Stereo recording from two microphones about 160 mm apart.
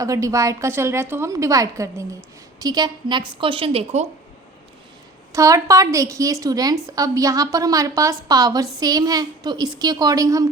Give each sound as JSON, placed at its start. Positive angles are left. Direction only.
{"t": 0.0, "sound": "a woman's voice", "side_deg": -20}
{"t": 5.3, "sound": "a woman's voice", "side_deg": -20}